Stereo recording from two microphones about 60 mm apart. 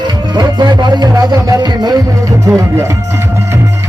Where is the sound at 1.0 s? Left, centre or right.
Right.